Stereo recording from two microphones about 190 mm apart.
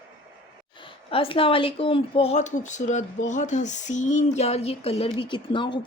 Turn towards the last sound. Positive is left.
turn(degrees=25)  # may be behind; listen again after turning